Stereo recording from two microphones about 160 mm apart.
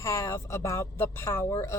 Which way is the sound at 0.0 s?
15° left (ahead or behind).